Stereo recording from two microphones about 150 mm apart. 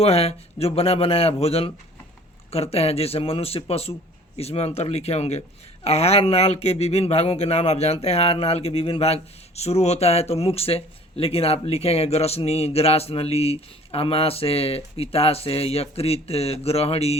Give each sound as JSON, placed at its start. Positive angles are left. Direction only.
{"t": 0.0, "sound": "speech", "side_deg": 40}